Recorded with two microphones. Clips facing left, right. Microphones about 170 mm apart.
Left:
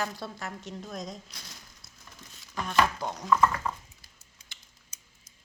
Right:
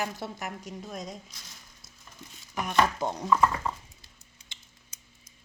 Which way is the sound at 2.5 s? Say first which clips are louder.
Right 1 dB; 20° right (ahead or behind).